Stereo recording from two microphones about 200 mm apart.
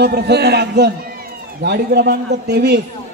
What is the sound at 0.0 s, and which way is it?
A man's voice, 55° right (ahead or behind).